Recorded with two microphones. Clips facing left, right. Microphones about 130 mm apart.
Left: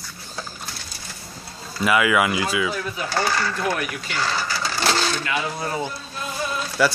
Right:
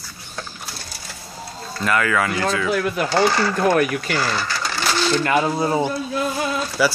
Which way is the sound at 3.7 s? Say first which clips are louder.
Right 8 dB; 55° right (ahead or behind).